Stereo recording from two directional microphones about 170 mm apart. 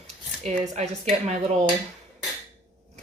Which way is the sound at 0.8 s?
40° right (ahead or behind).